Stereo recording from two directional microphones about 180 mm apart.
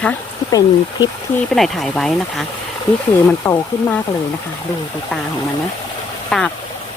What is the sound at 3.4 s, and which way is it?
Speech, 10° left (ahead or behind).